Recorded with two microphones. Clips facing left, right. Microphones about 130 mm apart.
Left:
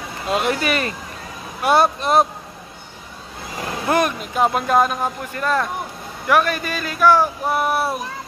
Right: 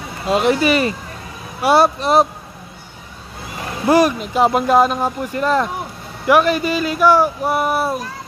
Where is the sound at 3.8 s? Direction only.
5° right (ahead or behind).